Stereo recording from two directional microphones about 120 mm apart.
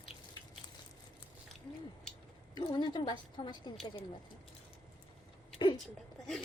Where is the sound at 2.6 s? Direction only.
40° left (ahead or behind).